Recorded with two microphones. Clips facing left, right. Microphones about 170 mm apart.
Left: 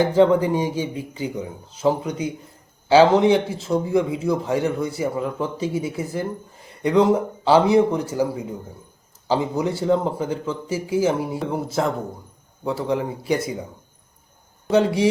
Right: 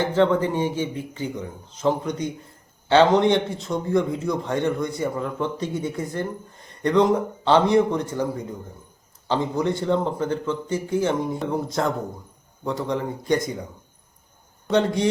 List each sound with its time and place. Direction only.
0.0 s a man's voice: 10° left (ahead or behind)
14.7 s speech: 5° left (ahead or behind)